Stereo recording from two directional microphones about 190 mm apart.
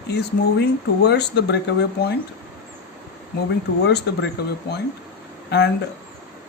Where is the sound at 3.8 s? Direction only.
65° left (ahead or behind).